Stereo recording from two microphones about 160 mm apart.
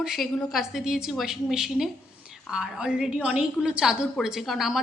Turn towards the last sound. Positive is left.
turn(degrees=0)  # may be behind; listen again after turning